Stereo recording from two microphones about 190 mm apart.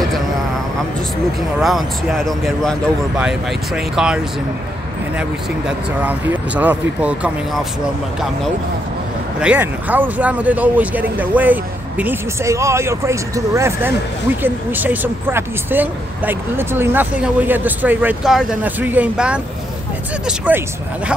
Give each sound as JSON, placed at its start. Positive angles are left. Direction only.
{"t": 1.6, "sound": "speech", "side_deg": 0}
{"t": 5.7, "sound": "speech", "side_deg": -10}
{"t": 9.4, "sound": "speech", "side_deg": -5}